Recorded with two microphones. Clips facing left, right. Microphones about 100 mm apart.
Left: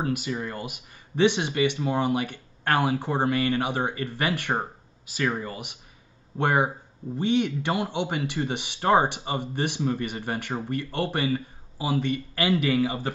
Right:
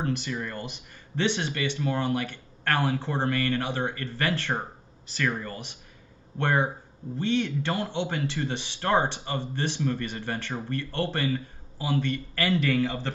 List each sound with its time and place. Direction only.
0.0 s speech: 10° left (ahead or behind)